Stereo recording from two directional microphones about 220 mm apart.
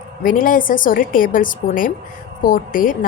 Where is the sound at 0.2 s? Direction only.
40° left (ahead or behind).